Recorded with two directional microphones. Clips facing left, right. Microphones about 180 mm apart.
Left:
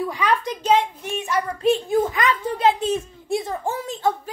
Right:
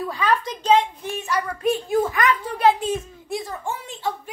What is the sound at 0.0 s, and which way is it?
A child's voice, 15° left (ahead or behind).